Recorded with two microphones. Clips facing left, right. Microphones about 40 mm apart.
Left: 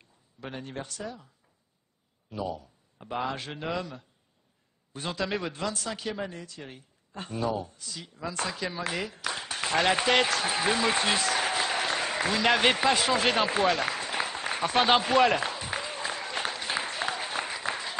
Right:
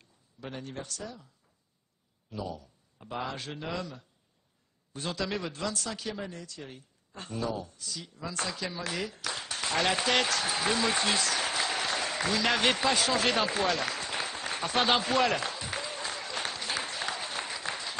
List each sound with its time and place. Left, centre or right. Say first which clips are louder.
0.0 s speech: left 2 dB; centre
2.2 s a man's voice: left 4 dB; left